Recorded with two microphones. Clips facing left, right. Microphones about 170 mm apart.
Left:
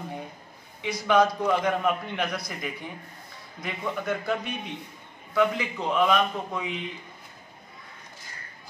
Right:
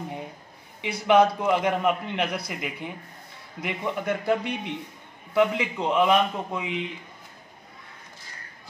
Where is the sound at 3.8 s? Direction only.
20° right (ahead or behind).